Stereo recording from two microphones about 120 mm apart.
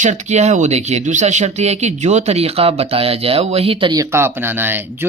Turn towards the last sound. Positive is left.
turn(degrees=-15)  # may be behind; listen again after turning